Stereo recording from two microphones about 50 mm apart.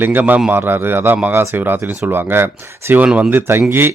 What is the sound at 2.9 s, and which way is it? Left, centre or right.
Speech, right.